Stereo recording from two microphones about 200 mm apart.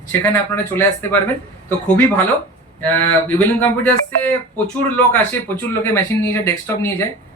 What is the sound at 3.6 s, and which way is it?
Speech, 10° left (ahead or behind).